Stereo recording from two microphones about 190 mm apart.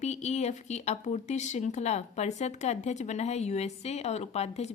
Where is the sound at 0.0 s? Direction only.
35° left (ahead or behind).